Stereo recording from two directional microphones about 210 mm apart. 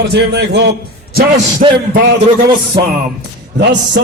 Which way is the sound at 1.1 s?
40° right (ahead or behind).